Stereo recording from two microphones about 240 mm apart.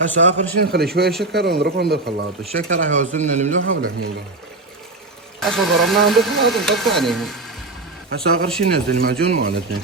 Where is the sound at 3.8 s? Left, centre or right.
Right.